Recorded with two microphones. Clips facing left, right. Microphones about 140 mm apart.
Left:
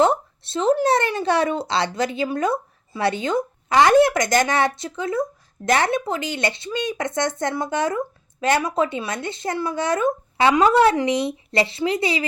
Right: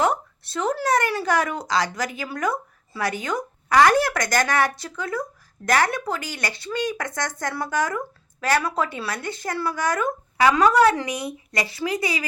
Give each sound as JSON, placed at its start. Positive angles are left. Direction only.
{"t": 0.0, "sound": "speech", "side_deg": 25}